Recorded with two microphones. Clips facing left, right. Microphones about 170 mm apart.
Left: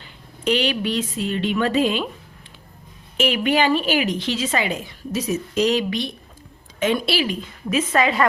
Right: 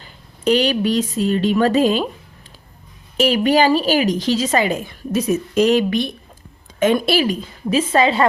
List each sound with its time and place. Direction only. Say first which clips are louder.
0.0 s a woman's voice: right 5 dB; 40° right (ahead or behind)
3.2 s a woman's voice: right 5 dB; 40° right (ahead or behind)
7.7 s a woman's voice: right 4 dB; 30° right (ahead or behind)